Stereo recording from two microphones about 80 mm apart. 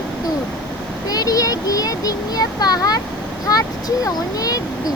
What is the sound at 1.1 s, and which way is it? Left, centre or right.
A child's voice, left.